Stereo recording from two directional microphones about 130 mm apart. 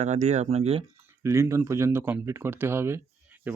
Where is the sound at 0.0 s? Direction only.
60° right (ahead or behind).